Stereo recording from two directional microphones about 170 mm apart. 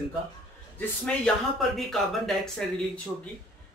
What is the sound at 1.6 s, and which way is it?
Speech, centre (ahead or behind).